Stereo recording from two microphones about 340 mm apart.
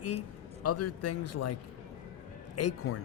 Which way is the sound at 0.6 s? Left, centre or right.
Left.